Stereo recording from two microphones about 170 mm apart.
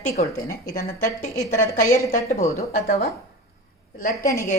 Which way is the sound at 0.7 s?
50° left (ahead or behind).